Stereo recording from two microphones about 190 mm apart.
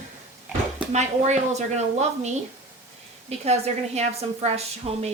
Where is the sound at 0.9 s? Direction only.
35° right (ahead or behind).